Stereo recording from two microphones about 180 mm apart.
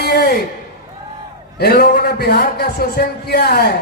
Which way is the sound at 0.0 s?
60° left (ahead or behind).